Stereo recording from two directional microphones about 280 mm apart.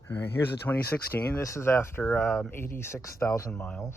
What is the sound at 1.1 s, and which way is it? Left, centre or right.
Speech, centre.